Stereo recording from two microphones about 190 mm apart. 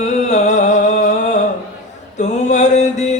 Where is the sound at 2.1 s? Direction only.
40° left (ahead or behind).